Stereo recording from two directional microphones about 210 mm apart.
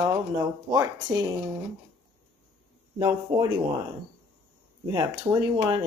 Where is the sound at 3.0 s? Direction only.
20° right (ahead or behind).